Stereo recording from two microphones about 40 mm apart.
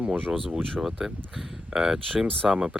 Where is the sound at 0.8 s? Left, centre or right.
Centre.